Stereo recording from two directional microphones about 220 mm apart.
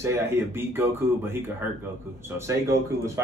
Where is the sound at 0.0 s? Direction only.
10° right (ahead or behind).